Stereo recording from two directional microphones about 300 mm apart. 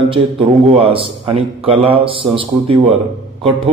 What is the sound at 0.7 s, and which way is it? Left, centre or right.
A man's voice, centre.